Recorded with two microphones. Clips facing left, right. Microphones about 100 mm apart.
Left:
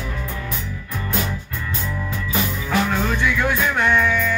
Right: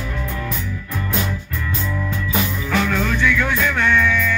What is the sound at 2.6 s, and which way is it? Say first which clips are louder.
Music: even; 30° left (ahead or behind).